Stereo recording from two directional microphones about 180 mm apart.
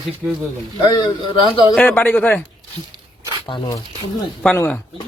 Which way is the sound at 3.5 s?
25° left (ahead or behind).